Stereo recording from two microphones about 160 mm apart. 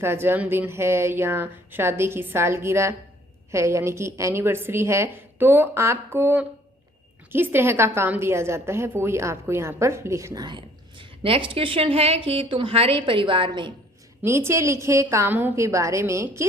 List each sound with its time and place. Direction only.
0.0 s a woman's voice: 15° right (ahead or behind); by 13.7 s 30° right (ahead or behind)
14.2 s a woman's voice: 15° right (ahead or behind)